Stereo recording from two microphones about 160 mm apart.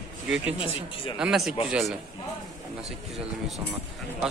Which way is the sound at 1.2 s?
5° right (ahead or behind).